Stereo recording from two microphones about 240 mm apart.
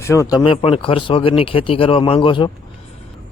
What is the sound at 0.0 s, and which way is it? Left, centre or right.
Speech, centre.